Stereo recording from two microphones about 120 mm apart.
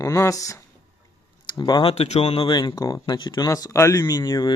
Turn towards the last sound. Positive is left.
turn(degrees=35)  # may be behind; listen again after turning